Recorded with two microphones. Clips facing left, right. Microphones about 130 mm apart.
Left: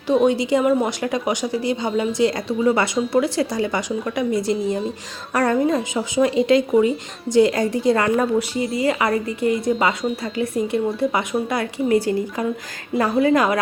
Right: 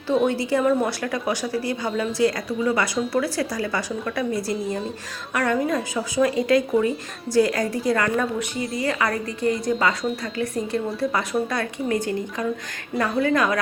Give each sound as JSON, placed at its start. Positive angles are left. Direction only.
{"t": 0.1, "sound": "a woman's voice", "side_deg": 15}
{"t": 5.3, "sound": "a woman's voice", "side_deg": 35}
{"t": 5.5, "sound": "a woman's voice", "side_deg": 25}
{"t": 11.5, "sound": "a woman's voice", "side_deg": 25}
{"t": 13.0, "sound": "a woman's voice", "side_deg": 30}